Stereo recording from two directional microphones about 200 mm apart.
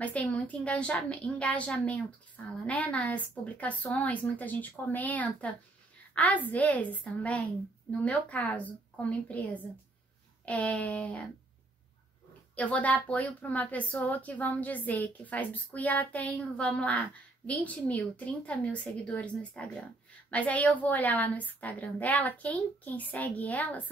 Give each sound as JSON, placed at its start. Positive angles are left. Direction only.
{"t": 0.0, "sound": "a woman's voice", "side_deg": 5}
{"t": 12.5, "sound": "a woman's voice", "side_deg": 5}